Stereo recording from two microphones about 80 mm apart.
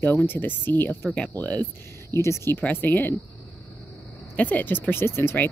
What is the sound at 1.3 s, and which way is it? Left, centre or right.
Speech, left.